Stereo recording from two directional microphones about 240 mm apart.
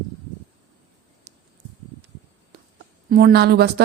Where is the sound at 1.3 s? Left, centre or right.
Right.